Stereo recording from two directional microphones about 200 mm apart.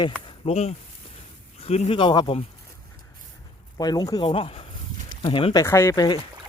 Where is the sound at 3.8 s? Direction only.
20° left (ahead or behind).